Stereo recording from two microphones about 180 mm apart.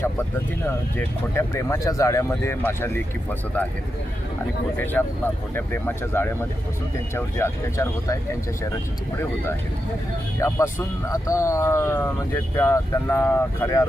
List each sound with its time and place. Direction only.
0.9 s speech: 15° left (ahead or behind)
5.0 s speech: 5° left (ahead or behind)
10.4 s speech: 15° left (ahead or behind)